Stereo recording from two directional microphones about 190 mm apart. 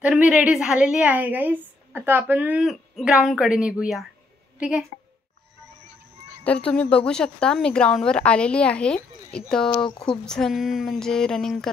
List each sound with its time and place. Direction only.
0.0 s a woman's voice: 5° right (ahead or behind)
6.4 s a woman's voice: 5° left (ahead or behind)